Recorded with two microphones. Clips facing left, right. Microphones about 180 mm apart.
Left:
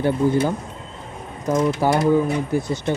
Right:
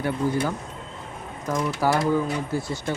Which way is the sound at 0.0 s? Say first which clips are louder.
Left 6 dB; 25° left (ahead or behind).